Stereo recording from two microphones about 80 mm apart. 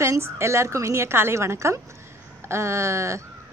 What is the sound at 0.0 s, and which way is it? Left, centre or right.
Speech, right.